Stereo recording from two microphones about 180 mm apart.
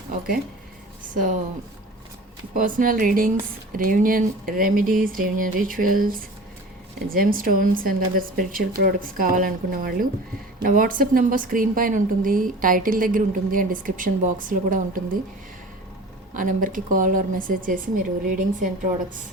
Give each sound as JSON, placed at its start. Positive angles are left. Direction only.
{"t": 2.6, "sound": "a woman's voice", "side_deg": -50}
{"t": 16.3, "sound": "a woman's voice", "side_deg": -50}